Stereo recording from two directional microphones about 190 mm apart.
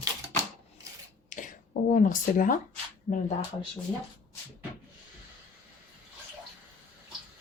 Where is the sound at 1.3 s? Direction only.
45° left (ahead or behind).